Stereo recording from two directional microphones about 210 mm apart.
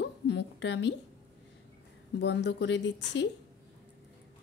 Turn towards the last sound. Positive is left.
turn(degrees=60)  # may be behind; listen again after turning